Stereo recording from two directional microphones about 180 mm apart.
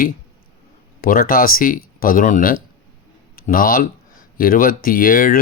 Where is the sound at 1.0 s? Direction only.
50° left (ahead or behind).